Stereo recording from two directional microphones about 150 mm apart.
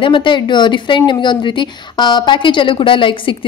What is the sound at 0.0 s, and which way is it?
A woman's voice, 35° left (ahead or behind).